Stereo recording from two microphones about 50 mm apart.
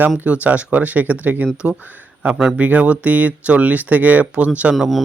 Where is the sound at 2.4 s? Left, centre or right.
Right.